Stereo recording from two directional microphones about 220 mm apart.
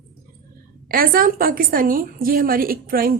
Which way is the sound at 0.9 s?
40° right (ahead or behind).